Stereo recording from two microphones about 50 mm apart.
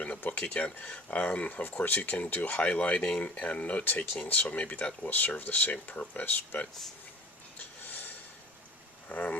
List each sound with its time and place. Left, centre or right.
0.3 s speech: left
7.8 s a sound: left
9.0 s speech: left